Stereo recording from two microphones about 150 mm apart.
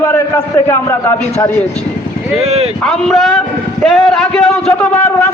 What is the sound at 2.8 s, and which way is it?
A man's voice, centre (ahead or behind).